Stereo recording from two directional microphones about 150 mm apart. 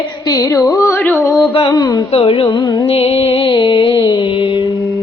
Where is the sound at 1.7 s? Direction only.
25° left (ahead or behind).